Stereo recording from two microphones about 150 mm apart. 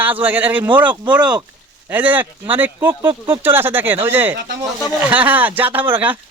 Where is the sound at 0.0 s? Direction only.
10° right (ahead or behind).